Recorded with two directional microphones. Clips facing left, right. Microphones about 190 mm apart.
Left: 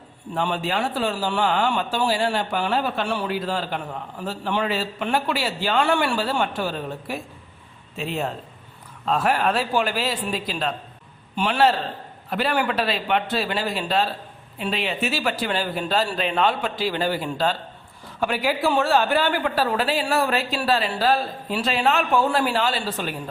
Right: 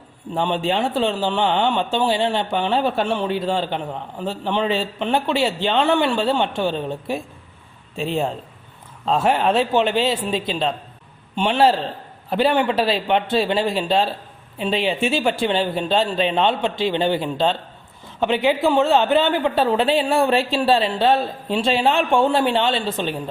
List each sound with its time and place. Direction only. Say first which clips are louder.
0.3 s speech: right 4 dB; 25° right (ahead or behind)
3.2 s a man's voice: right 4 dB; centre (ahead or behind)
3.5 s speech: right 4 dB; 30° right (ahead or behind)
9.0 s a man's voice: right 3 dB; 25° right (ahead or behind)